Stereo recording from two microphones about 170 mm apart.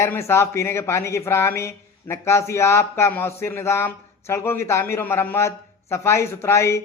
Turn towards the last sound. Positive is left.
turn(degrees=15)  # may be behind; listen again after turning